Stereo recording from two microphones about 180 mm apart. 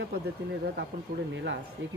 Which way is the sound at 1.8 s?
90° right.